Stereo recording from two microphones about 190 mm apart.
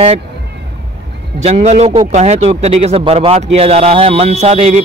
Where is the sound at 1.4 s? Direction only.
35° right (ahead or behind).